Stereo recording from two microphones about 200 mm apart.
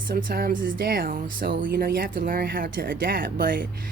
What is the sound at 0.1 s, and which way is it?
Speech, 45° right (ahead or behind).